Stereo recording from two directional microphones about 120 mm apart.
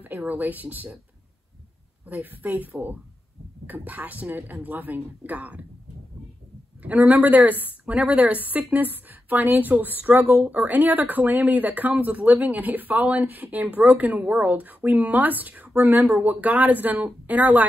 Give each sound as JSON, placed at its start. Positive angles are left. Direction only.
{"t": 0.0, "sound": "a woman's voice", "side_deg": -15}
{"t": 2.0, "sound": "a woman's voice", "side_deg": -15}
{"t": 6.8, "sound": "a woman's voice", "side_deg": -15}